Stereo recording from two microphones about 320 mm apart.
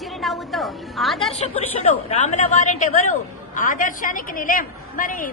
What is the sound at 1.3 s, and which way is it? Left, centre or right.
A woman's voice, centre.